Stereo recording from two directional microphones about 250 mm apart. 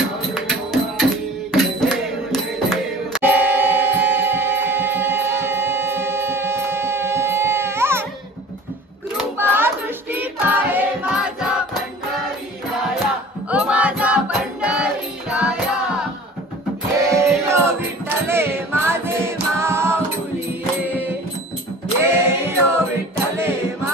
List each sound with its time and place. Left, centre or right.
0.3 s music: centre
9.1 s child singing: centre
13.5 s music: centre
22.0 s a capella: centre
23.3 s music: centre